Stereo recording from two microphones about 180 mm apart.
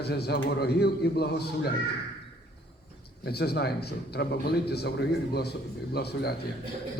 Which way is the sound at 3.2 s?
65° left (ahead or behind).